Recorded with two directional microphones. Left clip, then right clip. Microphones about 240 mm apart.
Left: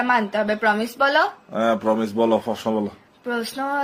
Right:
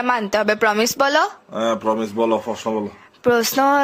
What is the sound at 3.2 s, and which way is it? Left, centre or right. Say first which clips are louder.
Speech: right 10 dB; right.